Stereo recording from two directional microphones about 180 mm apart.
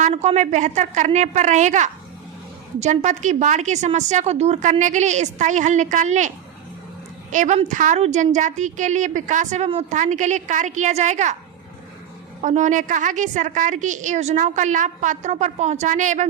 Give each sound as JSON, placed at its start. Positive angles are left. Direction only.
{"t": 0.0, "sound": "a woman's voice", "side_deg": -35}
{"t": 12.4, "sound": "a woman's voice", "side_deg": -40}